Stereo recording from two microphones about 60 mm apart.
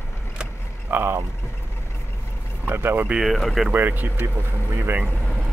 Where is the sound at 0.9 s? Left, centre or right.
Right.